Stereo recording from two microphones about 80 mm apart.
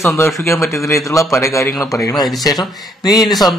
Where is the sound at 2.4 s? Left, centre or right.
Left.